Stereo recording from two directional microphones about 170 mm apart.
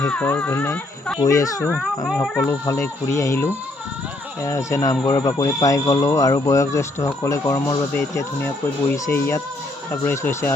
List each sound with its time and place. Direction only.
0.0 s speech: 5° left (ahead or behind)
1.2 s speech: 20° left (ahead or behind)
2.0 s speech: centre (ahead or behind)
2.4 s speech: 15° left (ahead or behind)